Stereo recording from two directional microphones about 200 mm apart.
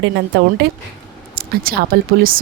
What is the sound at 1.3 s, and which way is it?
Speech, 50° right (ahead or behind).